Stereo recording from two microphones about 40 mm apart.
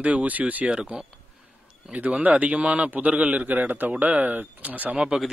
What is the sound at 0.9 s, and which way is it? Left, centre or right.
A man's voice, right.